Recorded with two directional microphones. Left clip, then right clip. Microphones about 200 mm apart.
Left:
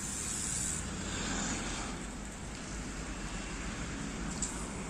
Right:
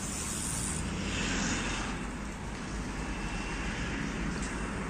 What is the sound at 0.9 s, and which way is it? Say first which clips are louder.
Vehicle: right 6 dB; 40° left (ahead or behind).